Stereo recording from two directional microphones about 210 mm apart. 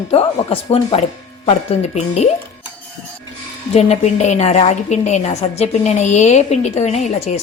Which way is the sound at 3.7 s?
30° left (ahead or behind).